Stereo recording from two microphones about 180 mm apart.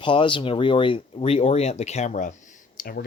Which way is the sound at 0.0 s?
25° left (ahead or behind).